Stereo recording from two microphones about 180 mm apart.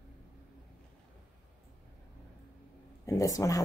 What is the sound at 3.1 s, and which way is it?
Speech, 20° left (ahead or behind).